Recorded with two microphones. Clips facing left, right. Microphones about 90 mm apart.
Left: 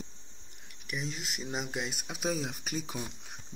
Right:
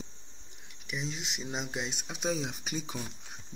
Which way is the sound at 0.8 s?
Centre (ahead or behind).